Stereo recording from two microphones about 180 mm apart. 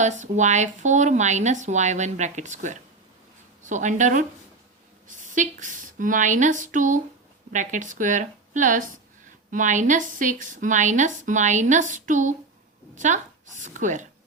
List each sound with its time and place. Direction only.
0.0 s a woman's voice: 40° right (ahead or behind)